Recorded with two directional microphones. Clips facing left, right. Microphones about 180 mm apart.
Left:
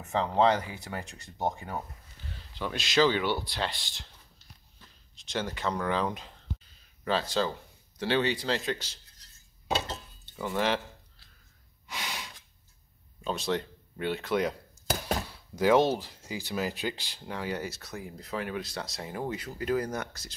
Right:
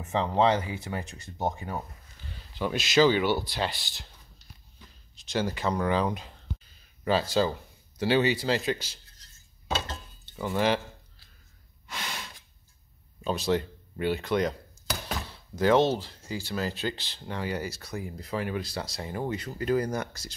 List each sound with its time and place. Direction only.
0.2 s speech: 5° right (ahead or behind)
2.6 s speech: 5° right (ahead or behind)
5.1 s speech: 5° right (ahead or behind)
7.1 s speech: 10° right (ahead or behind)
9.8 s dishes: centre (ahead or behind)
11.9 s breathing: 15° left (ahead or behind)
13.2 s speech: centre (ahead or behind)
14.9 s thunk: 40° left (ahead or behind)
15.5 s speech: 10° left (ahead or behind)